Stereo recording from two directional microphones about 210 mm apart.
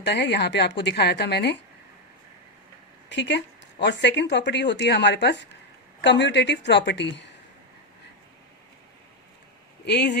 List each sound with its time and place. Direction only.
0.0 s a woman's voice: 55° left (ahead or behind)
3.1 s speech: 55° left (ahead or behind)
9.8 s speech: 55° left (ahead or behind)